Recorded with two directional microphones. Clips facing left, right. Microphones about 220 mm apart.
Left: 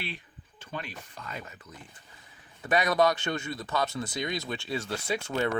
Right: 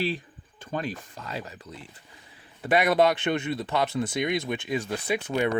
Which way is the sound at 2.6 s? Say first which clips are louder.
Right 3 dB; 25° right (ahead or behind).